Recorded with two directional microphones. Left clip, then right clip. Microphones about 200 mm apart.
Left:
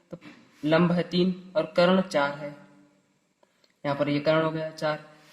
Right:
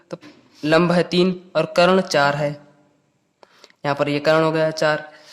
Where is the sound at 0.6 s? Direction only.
35° right (ahead or behind).